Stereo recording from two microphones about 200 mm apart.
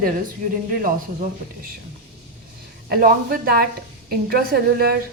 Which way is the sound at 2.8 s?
45° right (ahead or behind).